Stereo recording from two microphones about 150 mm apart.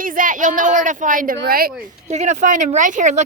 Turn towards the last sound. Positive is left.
turn(degrees=-55)  # may be behind; listen again after turning